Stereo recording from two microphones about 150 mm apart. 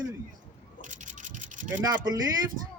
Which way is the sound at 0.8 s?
55° right (ahead or behind).